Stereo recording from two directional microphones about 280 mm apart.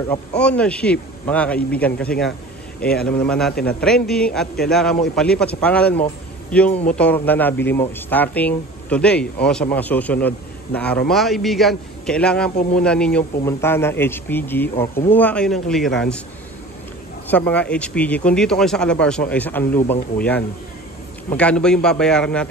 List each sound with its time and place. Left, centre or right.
0.4 s speech: centre
6.7 s speech: left
7.0 s a man's voice: centre
17.3 s speech: centre